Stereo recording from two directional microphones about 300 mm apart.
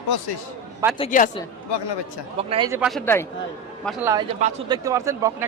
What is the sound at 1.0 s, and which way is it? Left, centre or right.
Speech, left.